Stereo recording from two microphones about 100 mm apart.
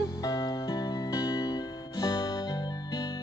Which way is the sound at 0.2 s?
40° left (ahead or behind).